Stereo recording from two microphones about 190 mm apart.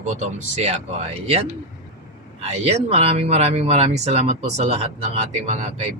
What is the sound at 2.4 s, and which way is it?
Speech, 35° right (ahead or behind).